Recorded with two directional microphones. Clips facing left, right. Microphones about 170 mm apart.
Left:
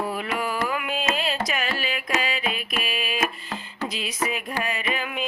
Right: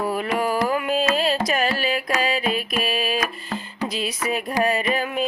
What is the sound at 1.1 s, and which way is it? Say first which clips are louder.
Carnatic music: right 6 dB; 40° right (ahead or behind).